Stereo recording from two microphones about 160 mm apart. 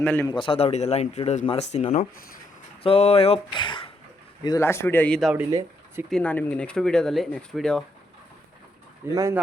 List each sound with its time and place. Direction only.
0.0 s a man's voice: 10° left (ahead or behind)
0.3 s speech: 35° left (ahead or behind)
4.4 s a man's voice: 20° left (ahead or behind)
5.5 s speech: 20° right (ahead or behind)
6.1 s speech: 5° left (ahead or behind)
9.0 s speech: 15° right (ahead or behind)